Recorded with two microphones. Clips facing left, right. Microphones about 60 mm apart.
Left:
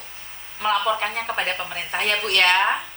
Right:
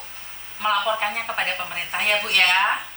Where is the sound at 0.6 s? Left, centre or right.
Centre.